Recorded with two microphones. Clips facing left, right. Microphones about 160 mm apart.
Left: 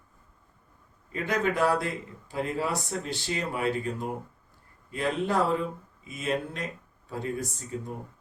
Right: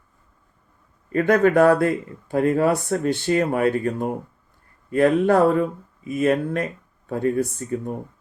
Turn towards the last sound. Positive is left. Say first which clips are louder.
# right 9 dB
turn(degrees=-60)  # may be behind; listen again after turning